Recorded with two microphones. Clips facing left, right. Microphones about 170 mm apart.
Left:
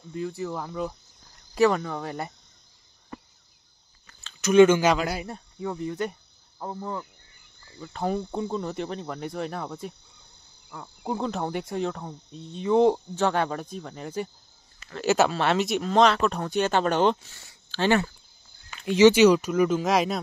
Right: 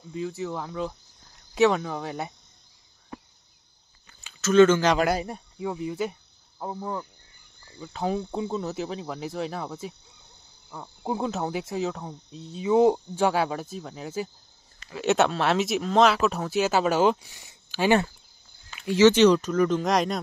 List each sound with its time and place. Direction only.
0.1 s speech: centre (ahead or behind)
4.4 s speech: 15° left (ahead or behind)
5.3 s speech: 10° right (ahead or behind)
10.7 s speech: 15° right (ahead or behind)
18.9 s speech: 15° left (ahead or behind)